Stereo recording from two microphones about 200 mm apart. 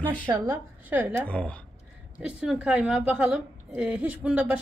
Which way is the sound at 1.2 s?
5° left (ahead or behind).